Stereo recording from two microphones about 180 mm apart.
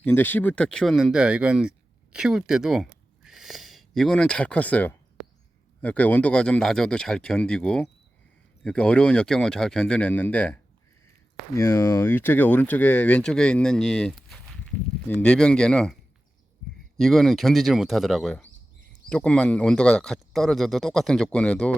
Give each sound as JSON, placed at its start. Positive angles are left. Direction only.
{"t": 0.0, "sound": "speech", "side_deg": 10}
{"t": 17.0, "sound": "speech", "side_deg": 0}